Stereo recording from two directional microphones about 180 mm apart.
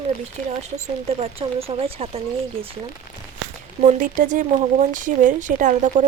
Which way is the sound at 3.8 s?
50° right (ahead or behind).